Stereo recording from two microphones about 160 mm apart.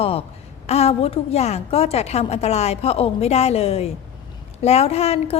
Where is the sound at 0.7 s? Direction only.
40° left (ahead or behind).